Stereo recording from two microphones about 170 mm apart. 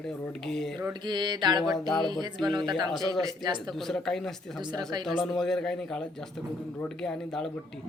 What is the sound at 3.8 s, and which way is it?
A man's voice, 5° left (ahead or behind).